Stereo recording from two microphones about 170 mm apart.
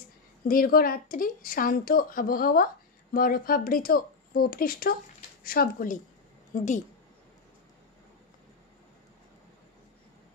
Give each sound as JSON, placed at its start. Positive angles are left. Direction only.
{"t": 0.5, "sound": "a woman's voice", "side_deg": 60}